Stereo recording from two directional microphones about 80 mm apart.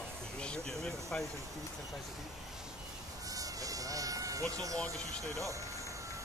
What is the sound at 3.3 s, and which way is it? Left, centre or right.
Vehicle, right.